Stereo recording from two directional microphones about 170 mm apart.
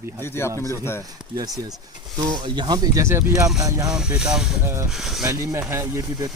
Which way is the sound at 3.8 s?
5° right (ahead or behind).